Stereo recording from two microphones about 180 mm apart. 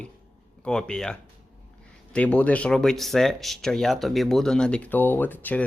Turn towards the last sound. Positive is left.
turn(degrees=10)  # may be behind; listen again after turning